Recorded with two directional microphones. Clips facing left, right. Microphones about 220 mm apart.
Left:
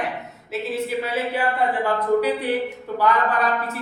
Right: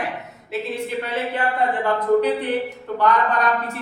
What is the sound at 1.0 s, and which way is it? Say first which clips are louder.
Speech: left 1 dB; 10° left (ahead or behind).